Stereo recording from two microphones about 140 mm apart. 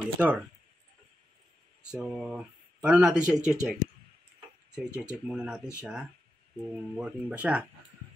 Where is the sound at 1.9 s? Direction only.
5° right (ahead or behind).